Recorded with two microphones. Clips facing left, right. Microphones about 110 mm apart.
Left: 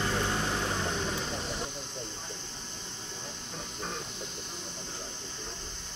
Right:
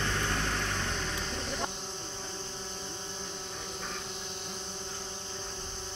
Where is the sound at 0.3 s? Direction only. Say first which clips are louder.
Left 2 dB; 15° left (ahead or behind).